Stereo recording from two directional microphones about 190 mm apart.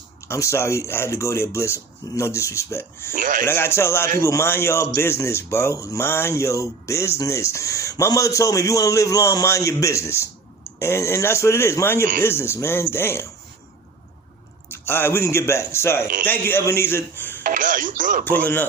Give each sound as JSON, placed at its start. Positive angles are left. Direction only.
{"t": 0.3, "sound": "speech", "side_deg": 15}
{"t": 3.2, "sound": "speech", "side_deg": -45}
{"t": 3.4, "sound": "speech", "side_deg": 15}
{"t": 14.7, "sound": "speech", "side_deg": 10}
{"t": 17.4, "sound": "speech", "side_deg": -45}
{"t": 18.3, "sound": "speech", "side_deg": 10}